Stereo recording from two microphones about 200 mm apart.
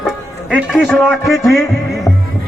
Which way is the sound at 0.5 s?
Centre (ahead or behind).